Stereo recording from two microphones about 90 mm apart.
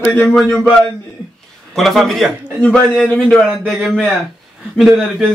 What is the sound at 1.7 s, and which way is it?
A man's voice, centre (ahead or behind).